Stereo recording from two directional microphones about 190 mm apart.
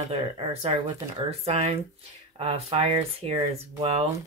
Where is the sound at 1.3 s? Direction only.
30° right (ahead or behind).